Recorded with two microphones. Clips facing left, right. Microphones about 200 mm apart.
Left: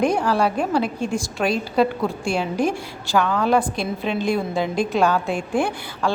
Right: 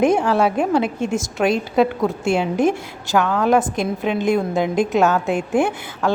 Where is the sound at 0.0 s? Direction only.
20° right (ahead or behind).